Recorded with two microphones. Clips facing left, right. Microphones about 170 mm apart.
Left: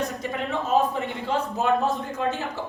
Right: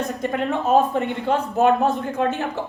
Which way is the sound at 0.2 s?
60° right (ahead or behind).